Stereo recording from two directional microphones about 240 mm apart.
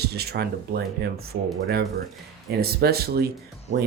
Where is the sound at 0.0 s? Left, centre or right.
Right.